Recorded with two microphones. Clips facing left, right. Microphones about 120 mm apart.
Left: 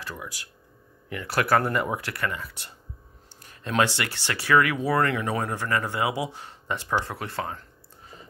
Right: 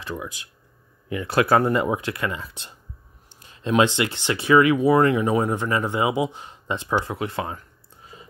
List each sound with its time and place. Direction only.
0.0 s speech: 20° right (ahead or behind)